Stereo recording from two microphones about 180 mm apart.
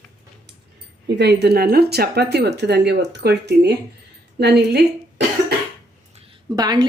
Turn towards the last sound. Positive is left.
turn(degrees=-25)  # may be behind; listen again after turning